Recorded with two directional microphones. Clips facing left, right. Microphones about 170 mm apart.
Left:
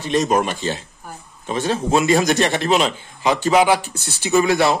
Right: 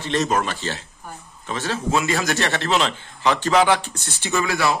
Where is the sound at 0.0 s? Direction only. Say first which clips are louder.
Left 3 dB; 15° left (ahead or behind).